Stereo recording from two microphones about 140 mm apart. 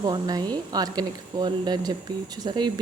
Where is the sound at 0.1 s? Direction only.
30° right (ahead or behind).